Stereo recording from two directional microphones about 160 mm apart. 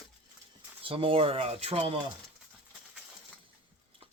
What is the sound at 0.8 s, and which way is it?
Speech, 35° right (ahead or behind).